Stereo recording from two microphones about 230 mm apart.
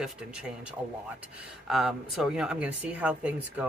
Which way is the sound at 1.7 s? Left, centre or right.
Centre.